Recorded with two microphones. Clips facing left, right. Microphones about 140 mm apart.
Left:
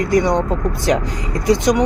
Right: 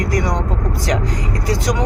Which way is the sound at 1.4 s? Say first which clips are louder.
Left 7 dB; 20° left (ahead or behind).